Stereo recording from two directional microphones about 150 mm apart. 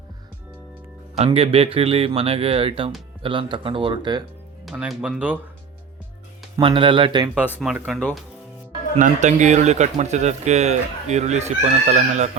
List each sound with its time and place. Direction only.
1.1 s a man's voice: 40° right (ahead or behind)
4.6 s speech: centre (ahead or behind)
6.6 s a man's voice: 35° right (ahead or behind)
7.3 s speech: 10° right (ahead or behind)
9.0 s speech: 55° right (ahead or behind)